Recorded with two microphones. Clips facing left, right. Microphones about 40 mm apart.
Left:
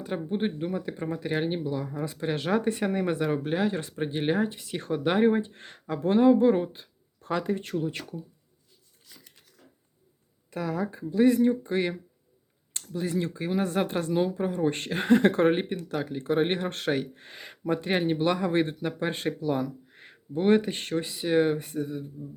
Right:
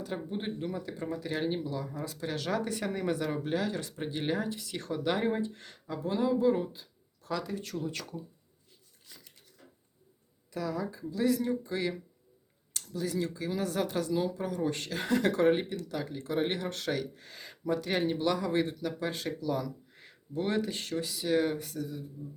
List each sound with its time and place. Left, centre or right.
0.0 s speech: left
9.0 s dog: centre
10.5 s speech: left